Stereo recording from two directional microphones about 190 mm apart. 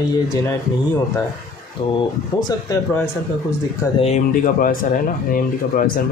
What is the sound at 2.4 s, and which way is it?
Speech, 20° left (ahead or behind).